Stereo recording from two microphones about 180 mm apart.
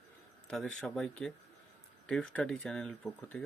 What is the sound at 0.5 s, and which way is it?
Speech, 5° left (ahead or behind).